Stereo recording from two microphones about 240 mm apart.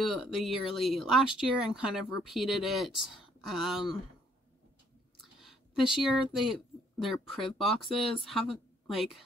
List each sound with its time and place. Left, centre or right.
0.0 s speech: centre
5.2 s speech: centre